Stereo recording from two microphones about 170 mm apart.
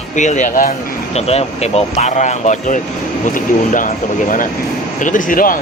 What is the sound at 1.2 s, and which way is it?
Speech, 35° left (ahead or behind).